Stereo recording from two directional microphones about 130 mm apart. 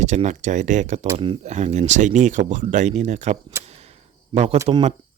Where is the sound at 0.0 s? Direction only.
65° right (ahead or behind).